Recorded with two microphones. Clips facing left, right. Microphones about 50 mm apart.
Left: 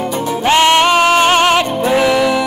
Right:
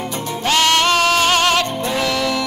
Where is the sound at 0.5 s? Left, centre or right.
Left.